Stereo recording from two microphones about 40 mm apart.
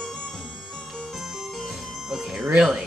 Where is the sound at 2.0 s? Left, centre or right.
Centre.